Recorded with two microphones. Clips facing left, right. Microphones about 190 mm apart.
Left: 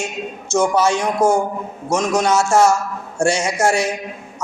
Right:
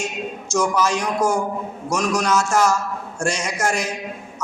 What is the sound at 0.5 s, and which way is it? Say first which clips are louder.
A man's voice: left 4 dB; 25° left (ahead or behind).